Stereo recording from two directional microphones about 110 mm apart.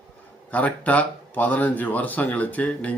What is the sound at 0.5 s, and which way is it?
Speech, 15° left (ahead or behind).